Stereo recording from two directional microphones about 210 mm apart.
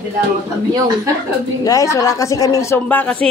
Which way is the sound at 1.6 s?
15° left (ahead or behind).